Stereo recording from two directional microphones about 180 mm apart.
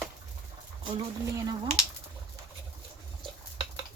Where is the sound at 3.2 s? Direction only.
25° right (ahead or behind).